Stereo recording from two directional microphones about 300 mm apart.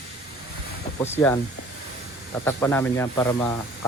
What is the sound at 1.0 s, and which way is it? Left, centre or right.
Speech, centre.